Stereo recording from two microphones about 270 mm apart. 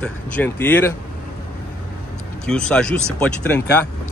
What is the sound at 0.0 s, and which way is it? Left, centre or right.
Speech, centre.